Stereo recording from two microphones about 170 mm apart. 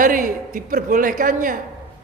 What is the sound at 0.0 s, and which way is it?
A man's voice, 55° right (ahead or behind).